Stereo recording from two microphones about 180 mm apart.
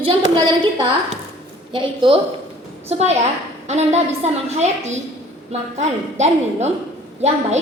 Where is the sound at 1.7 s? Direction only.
25° right (ahead or behind).